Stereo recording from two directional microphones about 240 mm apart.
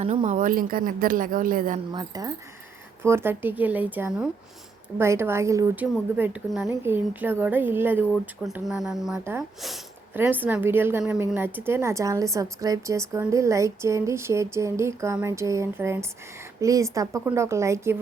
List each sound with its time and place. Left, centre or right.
0.0 s a woman's voice: right
1.9 s a woman's voice: centre